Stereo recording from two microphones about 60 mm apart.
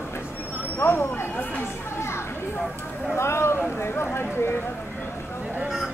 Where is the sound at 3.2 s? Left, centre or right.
Left.